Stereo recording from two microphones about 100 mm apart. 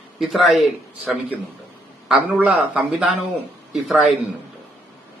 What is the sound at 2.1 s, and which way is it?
A man's voice, 15° right (ahead or behind).